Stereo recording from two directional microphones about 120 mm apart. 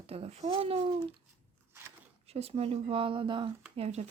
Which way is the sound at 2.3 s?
55° right (ahead or behind).